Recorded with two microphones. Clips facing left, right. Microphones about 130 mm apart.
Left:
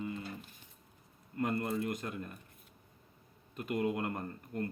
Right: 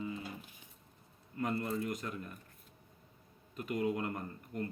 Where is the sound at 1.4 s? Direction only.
50° left (ahead or behind).